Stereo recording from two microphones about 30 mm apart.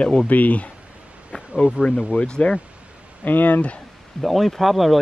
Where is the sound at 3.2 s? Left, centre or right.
Left.